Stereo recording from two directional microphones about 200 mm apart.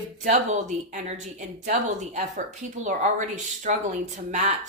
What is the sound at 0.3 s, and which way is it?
Speech, 35° right (ahead or behind).